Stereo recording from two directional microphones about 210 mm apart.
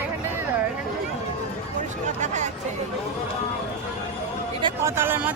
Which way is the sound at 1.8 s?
35° right (ahead or behind).